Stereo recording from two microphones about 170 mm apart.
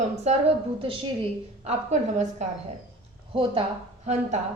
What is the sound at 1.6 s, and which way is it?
Speech, 40° right (ahead or behind).